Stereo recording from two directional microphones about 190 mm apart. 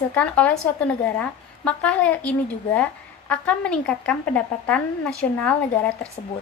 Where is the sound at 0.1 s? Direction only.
5° left (ahead or behind).